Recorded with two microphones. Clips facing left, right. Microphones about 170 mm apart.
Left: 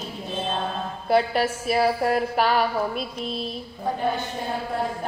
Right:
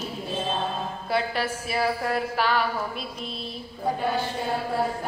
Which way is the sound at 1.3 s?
25° left (ahead or behind).